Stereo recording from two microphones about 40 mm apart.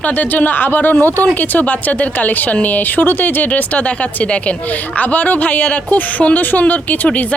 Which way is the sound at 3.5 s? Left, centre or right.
Left.